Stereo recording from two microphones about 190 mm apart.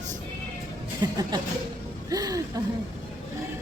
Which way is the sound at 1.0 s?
20° right (ahead or behind).